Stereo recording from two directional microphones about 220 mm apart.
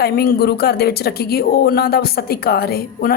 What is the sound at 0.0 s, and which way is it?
A woman's voice, 45° left (ahead or behind).